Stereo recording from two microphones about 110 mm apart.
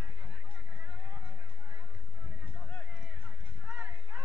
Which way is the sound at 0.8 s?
45° right (ahead or behind).